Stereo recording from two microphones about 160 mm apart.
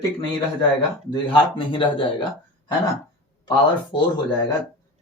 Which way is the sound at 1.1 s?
30° left (ahead or behind).